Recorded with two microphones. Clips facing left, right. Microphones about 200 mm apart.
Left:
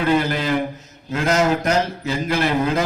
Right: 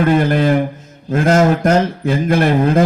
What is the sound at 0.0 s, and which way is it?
A man's voice, 50° right (ahead or behind).